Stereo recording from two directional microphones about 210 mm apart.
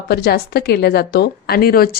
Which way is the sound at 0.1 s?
50° left (ahead or behind).